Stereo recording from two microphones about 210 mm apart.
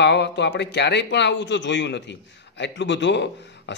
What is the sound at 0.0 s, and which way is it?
A man's voice, 55° left (ahead or behind).